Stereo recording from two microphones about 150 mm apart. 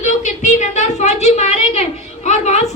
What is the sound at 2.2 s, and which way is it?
Music, 50° left (ahead or behind).